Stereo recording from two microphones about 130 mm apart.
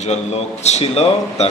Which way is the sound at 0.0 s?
60° left (ahead or behind).